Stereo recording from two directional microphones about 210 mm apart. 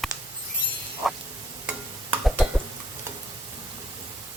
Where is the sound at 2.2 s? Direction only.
Centre (ahead or behind).